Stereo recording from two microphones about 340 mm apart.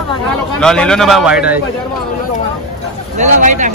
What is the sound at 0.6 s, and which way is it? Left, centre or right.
Speech, centre.